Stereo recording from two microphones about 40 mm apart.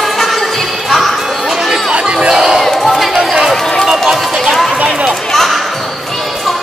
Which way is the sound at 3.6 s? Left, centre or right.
Centre.